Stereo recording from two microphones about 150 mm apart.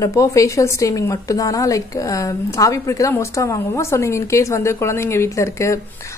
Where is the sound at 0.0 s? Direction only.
20° left (ahead or behind).